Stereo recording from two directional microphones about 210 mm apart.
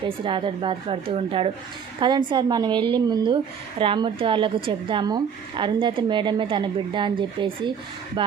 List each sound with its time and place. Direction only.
0.3 s a woman's voice: 25° right (ahead or behind)